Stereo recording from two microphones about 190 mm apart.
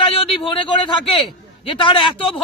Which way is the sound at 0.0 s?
30° left (ahead or behind).